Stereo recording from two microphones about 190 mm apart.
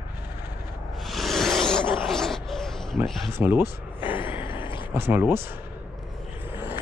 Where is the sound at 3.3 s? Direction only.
10° right (ahead or behind).